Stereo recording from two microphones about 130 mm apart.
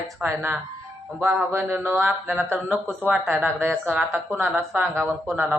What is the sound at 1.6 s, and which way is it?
Speech, 20° right (ahead or behind).